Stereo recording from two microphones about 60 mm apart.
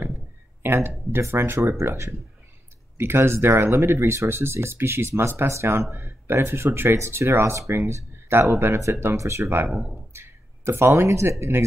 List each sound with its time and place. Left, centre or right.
0.6 s speech: right
10.1 s a sound: right
11.0 s speech: right